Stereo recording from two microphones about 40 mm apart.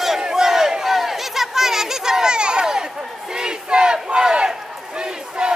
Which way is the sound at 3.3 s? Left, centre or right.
Right.